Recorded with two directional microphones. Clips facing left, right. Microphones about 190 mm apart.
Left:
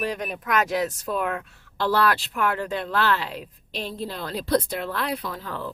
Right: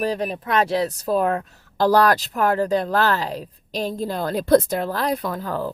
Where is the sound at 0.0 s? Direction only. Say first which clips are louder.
Right 5 dB; 35° right (ahead or behind).